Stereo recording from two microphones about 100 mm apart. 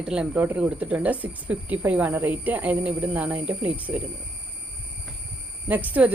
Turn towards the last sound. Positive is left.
turn(degrees=-15)  # may be behind; listen again after turning